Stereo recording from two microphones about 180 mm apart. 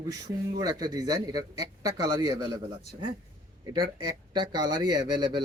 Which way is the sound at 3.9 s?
25° right (ahead or behind).